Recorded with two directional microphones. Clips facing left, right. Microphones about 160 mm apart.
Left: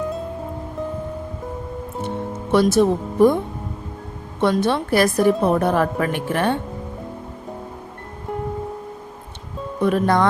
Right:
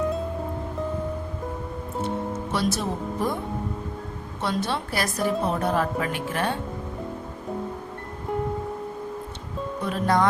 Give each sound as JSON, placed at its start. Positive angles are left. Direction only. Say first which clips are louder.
{"t": 2.5, "sound": "a woman's voice", "louder": "left 12 dB", "side_deg": 55}
{"t": 4.4, "sound": "a woman's voice", "louder": "left 9 dB", "side_deg": 55}
{"t": 9.8, "sound": "a woman's voice", "louder": "left 6 dB", "side_deg": 60}